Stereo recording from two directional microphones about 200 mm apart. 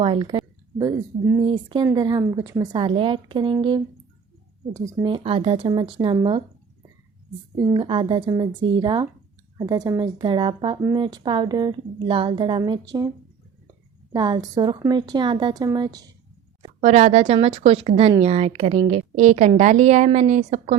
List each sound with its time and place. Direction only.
0.0 s speech: 25° right (ahead or behind)
7.6 s speech: 25° right (ahead or behind)
14.1 s speech: 20° right (ahead or behind)
16.8 s a woman's voice: 35° right (ahead or behind)